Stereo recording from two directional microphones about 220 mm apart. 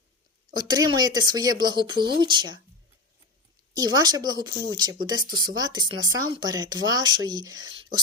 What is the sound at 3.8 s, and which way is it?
Speech, 20° right (ahead or behind).